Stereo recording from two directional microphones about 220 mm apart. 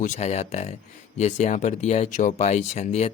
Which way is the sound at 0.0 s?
30° left (ahead or behind).